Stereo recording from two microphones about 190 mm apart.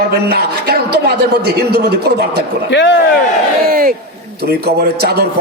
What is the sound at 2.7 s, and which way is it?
Speech, 65° left (ahead or behind).